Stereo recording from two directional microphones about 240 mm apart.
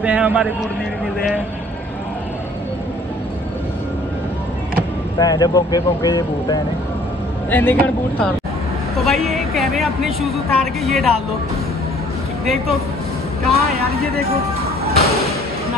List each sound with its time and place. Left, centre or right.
0.0 s a man's voice: centre
5.2 s a woman's voice: centre
13.4 s vehicle: centre
13.8 s speech: right